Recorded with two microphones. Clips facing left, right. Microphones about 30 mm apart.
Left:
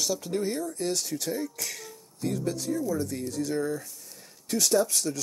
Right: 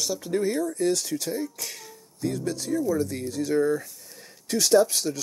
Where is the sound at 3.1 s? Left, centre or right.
Right.